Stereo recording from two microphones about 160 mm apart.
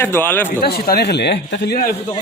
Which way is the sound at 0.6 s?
75° left (ahead or behind).